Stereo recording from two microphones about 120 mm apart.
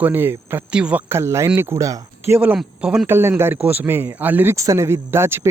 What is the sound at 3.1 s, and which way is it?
Speech, 20° right (ahead or behind).